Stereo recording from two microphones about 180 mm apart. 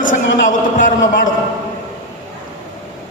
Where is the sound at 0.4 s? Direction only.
45° left (ahead or behind).